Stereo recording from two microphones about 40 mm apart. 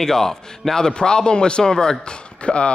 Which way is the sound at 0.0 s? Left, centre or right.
Centre.